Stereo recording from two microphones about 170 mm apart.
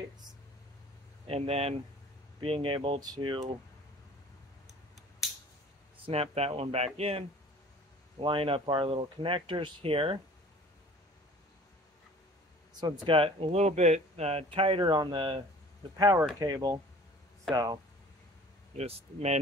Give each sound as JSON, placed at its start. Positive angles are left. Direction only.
{"t": 1.2, "sound": "speech", "side_deg": -35}
{"t": 6.0, "sound": "speech", "side_deg": -35}
{"t": 12.8, "sound": "speech", "side_deg": -25}
{"t": 18.8, "sound": "speech", "side_deg": -40}